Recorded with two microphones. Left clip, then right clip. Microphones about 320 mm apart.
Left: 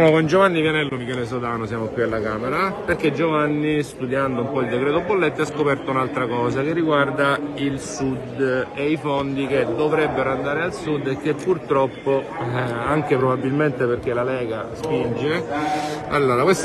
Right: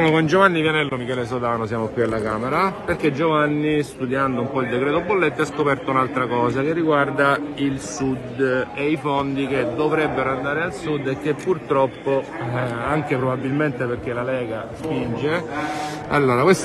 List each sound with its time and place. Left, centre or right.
0.0 s a man's voice: centre
2.1 s a man's voice: centre
15.2 s speech: centre
16.1 s a man's voice: right